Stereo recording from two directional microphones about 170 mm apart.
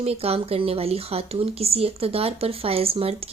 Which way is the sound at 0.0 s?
35° right (ahead or behind).